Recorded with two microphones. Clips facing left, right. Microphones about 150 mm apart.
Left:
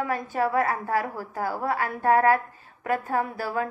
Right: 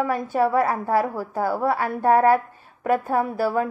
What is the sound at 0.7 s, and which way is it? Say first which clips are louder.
Speech: right 5 dB; 35° right (ahead or behind).